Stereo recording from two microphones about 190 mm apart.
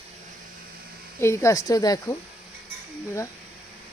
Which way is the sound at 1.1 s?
15° left (ahead or behind).